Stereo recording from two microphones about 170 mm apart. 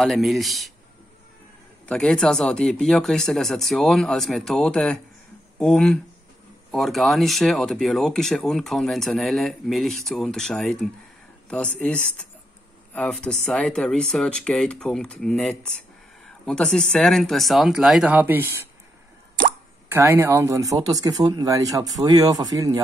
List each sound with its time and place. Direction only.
0.0 s speech: centre (ahead or behind)
1.9 s speech: 5° left (ahead or behind); by 18.7 s 10° right (ahead or behind)
19.9 s speech: 15° right (ahead or behind)